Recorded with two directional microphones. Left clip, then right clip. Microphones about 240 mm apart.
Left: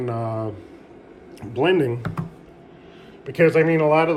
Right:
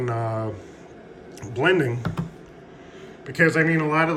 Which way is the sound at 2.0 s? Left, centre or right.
Centre.